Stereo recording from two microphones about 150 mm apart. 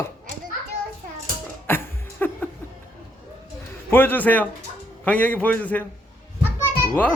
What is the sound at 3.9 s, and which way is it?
Speech, 10° left (ahead or behind).